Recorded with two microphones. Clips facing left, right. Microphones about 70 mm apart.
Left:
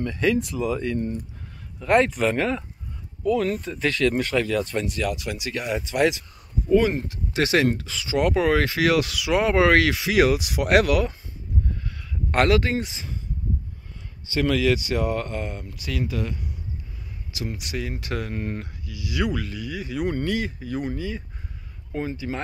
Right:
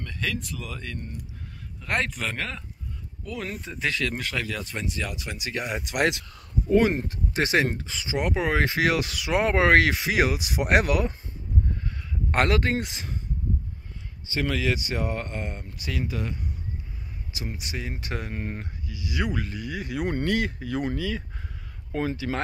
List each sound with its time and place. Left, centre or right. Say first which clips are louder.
0.0 s speech: left 9 dB; left
3.3 s speech: left 11 dB; centre
4.8 s speech: left 5 dB; centre
5.9 s speech: left 3 dB; right
7.0 s speech: left 2 dB; right; by 8.6 s centre
8.6 s speech: left 3 dB; right
11.7 s a sound: even; right
12.4 s speech: left 3 dB; right
14.3 s speech: left 5 dB; centre
17.4 s speech: left 4 dB; right
21.9 s speech: right 1 dB; right